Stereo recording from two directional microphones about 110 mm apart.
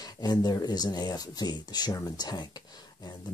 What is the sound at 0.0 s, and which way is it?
Speech, 35° left (ahead or behind).